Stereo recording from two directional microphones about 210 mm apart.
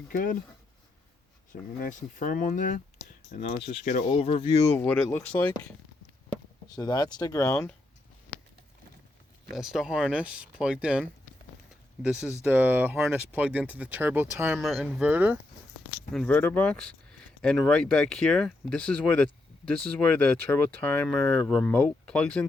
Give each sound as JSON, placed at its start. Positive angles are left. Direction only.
{"t": 0.1, "sound": "speech", "side_deg": 40}
{"t": 1.8, "sound": "speech", "side_deg": 40}
{"t": 4.7, "sound": "speech", "side_deg": 10}
{"t": 6.7, "sound": "speech", "side_deg": 20}
{"t": 9.5, "sound": "speech", "side_deg": 0}
{"t": 12.0, "sound": "speech", "side_deg": -5}
{"t": 14.6, "sound": "speech", "side_deg": 0}
{"t": 16.1, "sound": "speech", "side_deg": 5}